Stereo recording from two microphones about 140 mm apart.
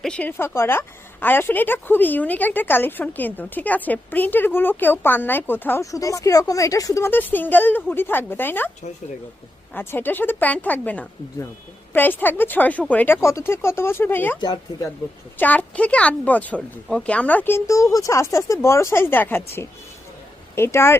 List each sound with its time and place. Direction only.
0.0 s a woman's voice: 10° left (ahead or behind)
9.7 s a woman's voice: 15° left (ahead or behind)
14.4 s speech: 25° left (ahead or behind)
15.4 s a woman's voice: 10° left (ahead or behind)